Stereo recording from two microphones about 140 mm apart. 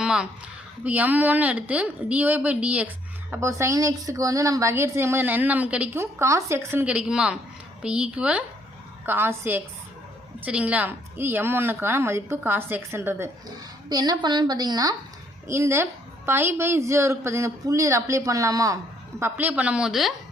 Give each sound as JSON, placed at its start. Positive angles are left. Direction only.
{"t": 0.0, "sound": "a sound", "side_deg": -5}
{"t": 0.9, "sound": "a woman's voice", "side_deg": -10}
{"t": 3.3, "sound": "a woman's voice", "side_deg": -20}
{"t": 13.9, "sound": "a woman's voice", "side_deg": -30}
{"t": 19.2, "sound": "a woman's voice", "side_deg": -10}